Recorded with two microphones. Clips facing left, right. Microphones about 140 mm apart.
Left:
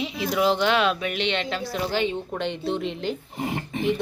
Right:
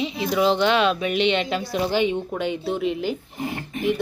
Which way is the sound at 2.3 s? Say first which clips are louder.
Right 2 dB; 5° right (ahead or behind).